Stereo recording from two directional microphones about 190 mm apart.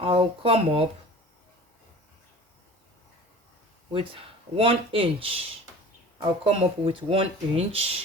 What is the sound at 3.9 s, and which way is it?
Speech, 30° right (ahead or behind).